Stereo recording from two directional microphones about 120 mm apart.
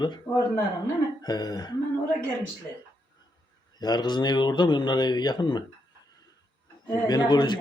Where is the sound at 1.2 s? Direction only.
35° left (ahead or behind).